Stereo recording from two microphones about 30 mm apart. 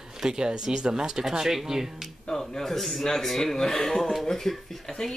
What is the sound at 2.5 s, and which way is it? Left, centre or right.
A man's voice, centre.